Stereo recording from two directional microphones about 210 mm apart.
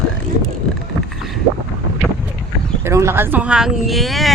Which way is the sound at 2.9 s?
15° right (ahead or behind).